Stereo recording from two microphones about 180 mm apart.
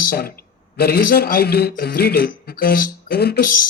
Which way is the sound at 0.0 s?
55° left (ahead or behind).